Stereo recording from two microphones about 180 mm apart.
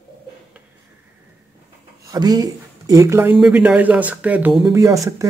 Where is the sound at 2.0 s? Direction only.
20° right (ahead or behind).